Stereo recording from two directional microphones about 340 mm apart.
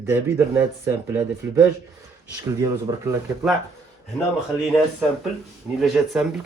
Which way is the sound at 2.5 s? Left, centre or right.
Centre.